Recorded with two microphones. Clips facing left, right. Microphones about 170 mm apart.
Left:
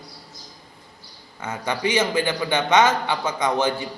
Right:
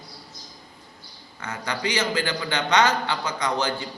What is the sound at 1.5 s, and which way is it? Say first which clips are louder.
A man's voice: left 4 dB; 25° left (ahead or behind).